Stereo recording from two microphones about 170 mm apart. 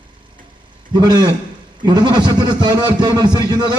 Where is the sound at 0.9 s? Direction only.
25° right (ahead or behind).